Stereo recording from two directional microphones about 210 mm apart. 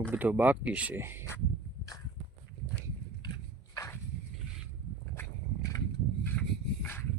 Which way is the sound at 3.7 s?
15° left (ahead or behind).